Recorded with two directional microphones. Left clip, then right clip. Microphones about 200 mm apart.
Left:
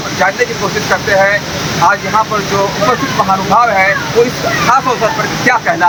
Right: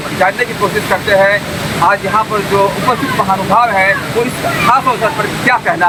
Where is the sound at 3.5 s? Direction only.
5° right (ahead or behind).